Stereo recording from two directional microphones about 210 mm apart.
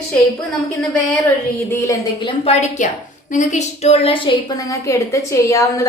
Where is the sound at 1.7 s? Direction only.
15° left (ahead or behind).